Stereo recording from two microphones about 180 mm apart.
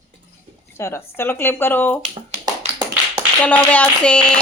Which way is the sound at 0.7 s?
15° left (ahead or behind).